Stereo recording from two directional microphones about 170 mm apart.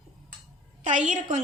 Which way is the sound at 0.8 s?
45° right (ahead or behind).